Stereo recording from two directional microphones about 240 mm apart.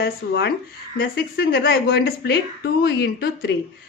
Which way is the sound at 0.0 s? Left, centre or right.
Left.